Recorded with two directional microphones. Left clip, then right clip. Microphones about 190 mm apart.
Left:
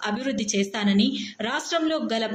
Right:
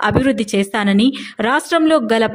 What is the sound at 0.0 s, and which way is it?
A woman's voice, 60° right (ahead or behind).